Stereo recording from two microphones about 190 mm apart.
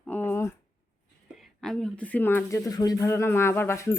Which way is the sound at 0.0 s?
10° left (ahead or behind).